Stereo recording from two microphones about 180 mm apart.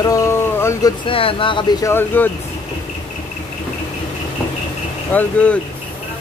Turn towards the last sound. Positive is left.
turn(degrees=5)  # may be behind; listen again after turning